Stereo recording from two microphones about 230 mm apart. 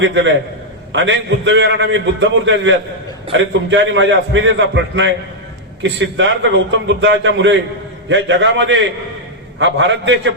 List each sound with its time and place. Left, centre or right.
0.0 s a man's voice: right